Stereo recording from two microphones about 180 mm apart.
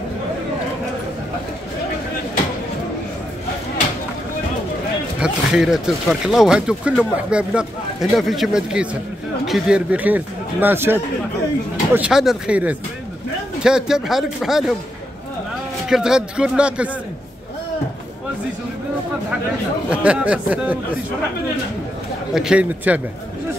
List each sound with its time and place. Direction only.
5.2 s speech: 5° right (ahead or behind)
15.9 s speech: 5° right (ahead or behind)
19.9 s speech: 5° right (ahead or behind)
22.3 s speech: 5° right (ahead or behind)